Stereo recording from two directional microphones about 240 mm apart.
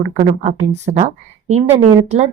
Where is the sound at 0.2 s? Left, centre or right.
Right.